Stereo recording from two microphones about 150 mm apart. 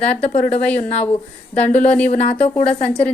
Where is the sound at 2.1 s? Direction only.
50° left (ahead or behind).